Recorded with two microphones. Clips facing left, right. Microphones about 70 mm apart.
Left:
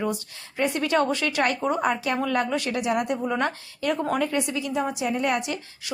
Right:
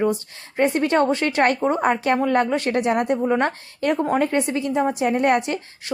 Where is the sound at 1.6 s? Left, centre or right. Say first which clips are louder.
Right 4 dB; right.